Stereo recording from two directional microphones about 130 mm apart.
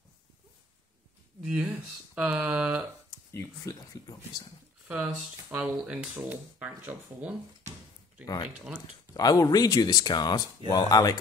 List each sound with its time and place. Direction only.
1.4 s speech: 5° right (ahead or behind)
3.1 s speech: 25° left (ahead or behind)
4.8 s speech: 10° right (ahead or behind)
8.5 s speech: 10° right (ahead or behind)
9.1 s speech: 30° left (ahead or behind)